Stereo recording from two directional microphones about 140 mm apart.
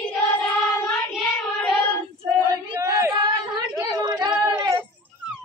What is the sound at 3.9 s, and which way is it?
Child singing, 30° right (ahead or behind).